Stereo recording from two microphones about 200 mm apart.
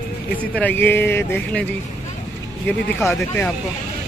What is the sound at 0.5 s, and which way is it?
Speech, 10° left (ahead or behind).